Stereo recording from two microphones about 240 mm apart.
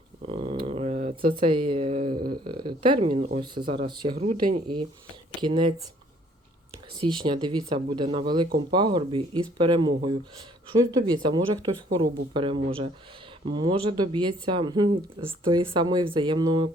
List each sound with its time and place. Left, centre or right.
0.2 s a sound: right
2.5 s speech: centre
4.2 s speech: right
5.4 s speech: centre
7.0 s speech: centre